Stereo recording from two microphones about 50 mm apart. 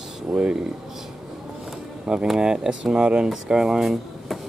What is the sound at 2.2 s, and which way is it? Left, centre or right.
Speech, centre.